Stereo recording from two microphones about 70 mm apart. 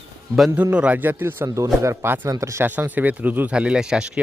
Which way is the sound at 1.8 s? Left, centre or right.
Right.